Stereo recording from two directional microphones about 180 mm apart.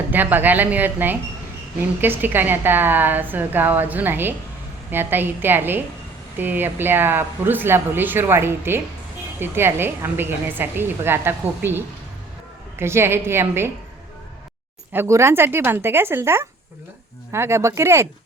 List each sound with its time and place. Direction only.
0.1 s speech: 10° right (ahead or behind)
14.9 s speech: 15° right (ahead or behind)